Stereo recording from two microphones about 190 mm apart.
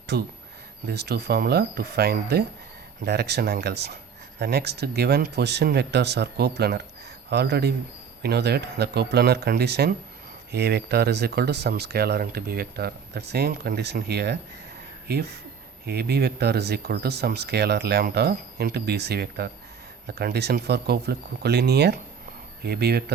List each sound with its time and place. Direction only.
0.1 s speech: 60° right (ahead or behind)